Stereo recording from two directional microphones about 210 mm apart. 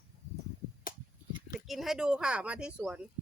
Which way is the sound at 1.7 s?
Centre (ahead or behind).